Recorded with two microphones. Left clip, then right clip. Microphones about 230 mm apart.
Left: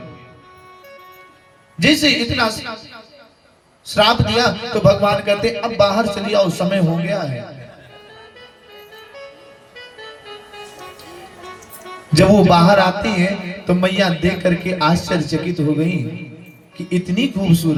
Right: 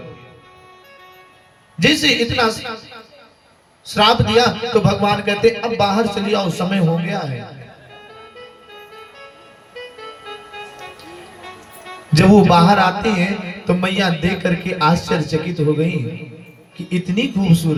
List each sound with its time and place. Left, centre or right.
1.9 s a man's voice: right
10.2 s music: left
12.2 s a man's voice: right